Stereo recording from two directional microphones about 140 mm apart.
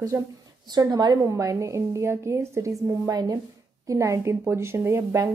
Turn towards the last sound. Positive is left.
turn(degrees=-20)  # may be behind; listen again after turning